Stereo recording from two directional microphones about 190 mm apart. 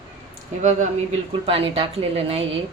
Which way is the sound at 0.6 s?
35° right (ahead or behind).